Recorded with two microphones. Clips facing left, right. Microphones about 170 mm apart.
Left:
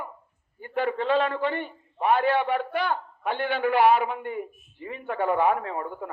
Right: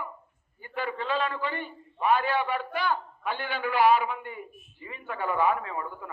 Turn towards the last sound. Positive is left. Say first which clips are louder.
# left 4 dB
turn(degrees=55)  # may be behind; listen again after turning